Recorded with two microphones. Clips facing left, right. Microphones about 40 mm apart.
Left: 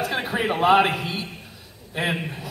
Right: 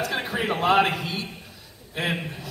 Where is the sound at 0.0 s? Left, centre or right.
Centre.